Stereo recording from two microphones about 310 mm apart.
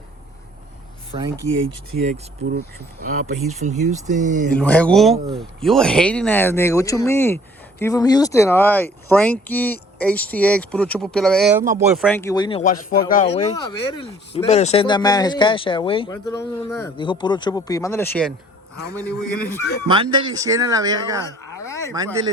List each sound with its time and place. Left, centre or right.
1.1 s speech: centre
2.0 s speech: right
3.0 s speech: right
3.5 s speech: right
4.5 s speech: centre
5.1 s speech: centre
5.6 s speech: centre
19.9 s speech: centre
21.6 s a sound: centre